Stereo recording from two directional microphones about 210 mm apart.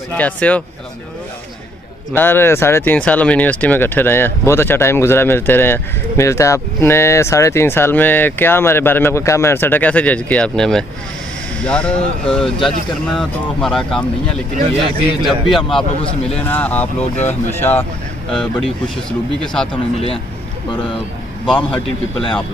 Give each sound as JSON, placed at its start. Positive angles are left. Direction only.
{"t": 0.2, "sound": "speech", "side_deg": 5}
{"t": 2.1, "sound": "speech", "side_deg": 10}
{"t": 21.5, "sound": "a man's voice", "side_deg": 25}